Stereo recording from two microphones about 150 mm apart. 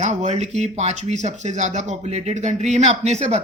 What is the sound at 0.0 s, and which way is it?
Speech, 50° right (ahead or behind).